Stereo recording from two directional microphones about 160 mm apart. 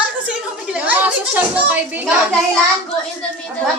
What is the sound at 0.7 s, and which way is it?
Speech, 10° right (ahead or behind).